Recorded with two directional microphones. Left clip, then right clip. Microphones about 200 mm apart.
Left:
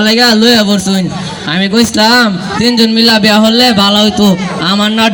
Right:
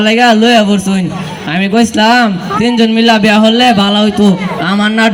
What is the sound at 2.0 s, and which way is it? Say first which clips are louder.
Speech: left 1 dB; 25° right (ahead or behind).